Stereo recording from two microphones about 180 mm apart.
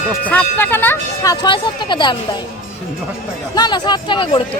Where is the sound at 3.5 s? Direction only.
25° left (ahead or behind).